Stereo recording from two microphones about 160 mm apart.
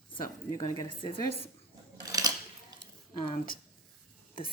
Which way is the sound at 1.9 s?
25° right (ahead or behind).